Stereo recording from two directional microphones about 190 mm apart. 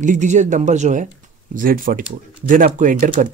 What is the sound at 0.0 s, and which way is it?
Speech, 40° right (ahead or behind).